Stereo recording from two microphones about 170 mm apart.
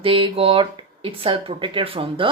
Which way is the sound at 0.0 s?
30° right (ahead or behind).